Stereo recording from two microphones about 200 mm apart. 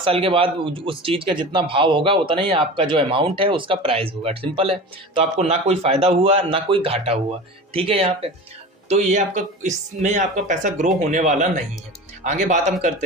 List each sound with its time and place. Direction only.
0.0 s speech: 25° right (ahead or behind)